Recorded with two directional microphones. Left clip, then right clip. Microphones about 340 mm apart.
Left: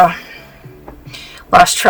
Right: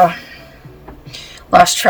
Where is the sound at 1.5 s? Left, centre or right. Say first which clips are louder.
Left 1 dB; centre.